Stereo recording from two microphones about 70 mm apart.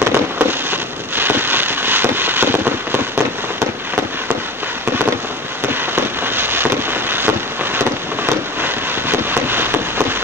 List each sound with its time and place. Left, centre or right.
0.0 s fireworks: right
5.7 s a sound: right
8.5 s vehicle: right